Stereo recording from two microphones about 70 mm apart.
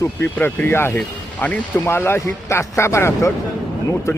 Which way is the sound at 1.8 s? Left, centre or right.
Left.